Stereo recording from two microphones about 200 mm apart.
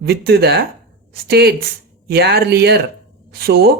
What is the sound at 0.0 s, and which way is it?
Speech, 50° right (ahead or behind).